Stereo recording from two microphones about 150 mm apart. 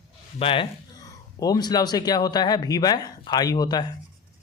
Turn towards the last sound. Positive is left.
turn(degrees=25)  # may be behind; listen again after turning